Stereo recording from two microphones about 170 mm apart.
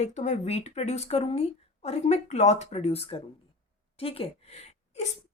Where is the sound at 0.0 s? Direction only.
40° left (ahead or behind).